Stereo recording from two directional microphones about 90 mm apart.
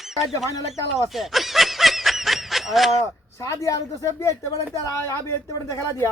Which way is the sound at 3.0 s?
35° left (ahead or behind).